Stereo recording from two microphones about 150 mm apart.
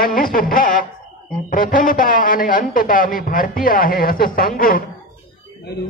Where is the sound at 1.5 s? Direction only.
65° left (ahead or behind).